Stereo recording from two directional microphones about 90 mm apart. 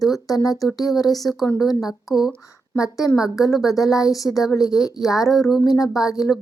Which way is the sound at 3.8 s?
5° right (ahead or behind).